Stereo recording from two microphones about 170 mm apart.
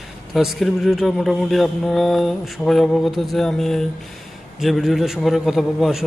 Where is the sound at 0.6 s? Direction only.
Centre (ahead or behind).